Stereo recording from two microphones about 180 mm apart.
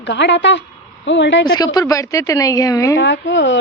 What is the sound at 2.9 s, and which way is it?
Speech, 85° left.